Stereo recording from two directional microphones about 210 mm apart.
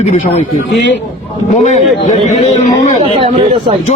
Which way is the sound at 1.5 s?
35° left (ahead or behind).